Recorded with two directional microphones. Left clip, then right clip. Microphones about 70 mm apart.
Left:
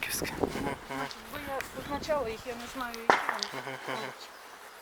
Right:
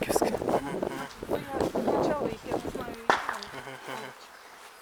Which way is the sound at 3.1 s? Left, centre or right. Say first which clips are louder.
Left 1 dB; centre.